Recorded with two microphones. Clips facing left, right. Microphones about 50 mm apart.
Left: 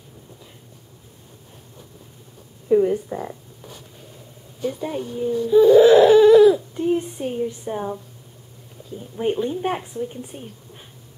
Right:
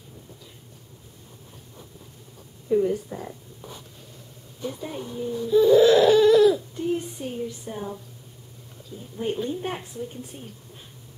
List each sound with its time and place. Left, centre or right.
2.7 s speech: left
4.6 s speech: left
9.1 s speech: left